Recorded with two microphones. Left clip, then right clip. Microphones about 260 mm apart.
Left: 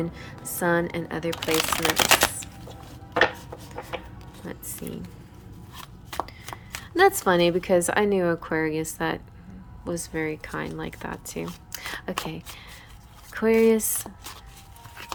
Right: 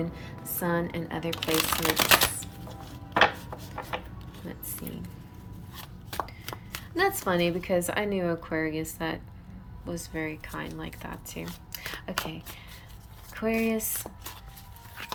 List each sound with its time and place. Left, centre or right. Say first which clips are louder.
0.0 s speech: left 3 dB; centre
4.4 s speech: left 4 dB; centre
6.1 s speech: left 2 dB; centre